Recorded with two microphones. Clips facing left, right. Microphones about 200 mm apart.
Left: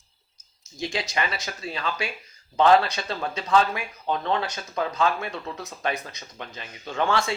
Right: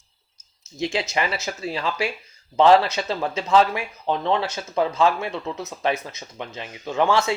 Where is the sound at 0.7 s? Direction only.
25° right (ahead or behind).